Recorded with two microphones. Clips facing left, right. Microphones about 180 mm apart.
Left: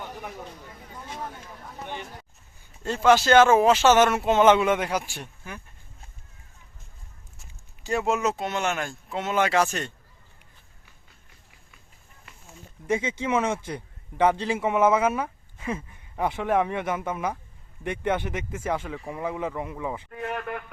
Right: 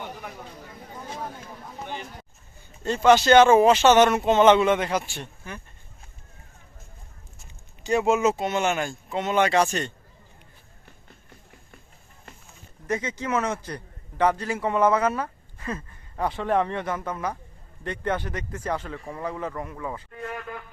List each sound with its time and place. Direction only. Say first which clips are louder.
2.8 s speech: right 2 dB; 5° left (ahead or behind)
7.9 s speech: right 4 dB; centre (ahead or behind)
10.8 s run: right 8 dB; 50° right (ahead or behind)
12.9 s speech: left 2 dB; 10° left (ahead or behind)
14.6 s speech: even; 10° left (ahead or behind)
20.2 s a man's voice: left 4 dB; 65° left (ahead or behind)